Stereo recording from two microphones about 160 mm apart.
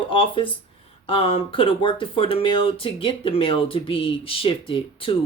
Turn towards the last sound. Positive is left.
turn(degrees=35)  # may be behind; listen again after turning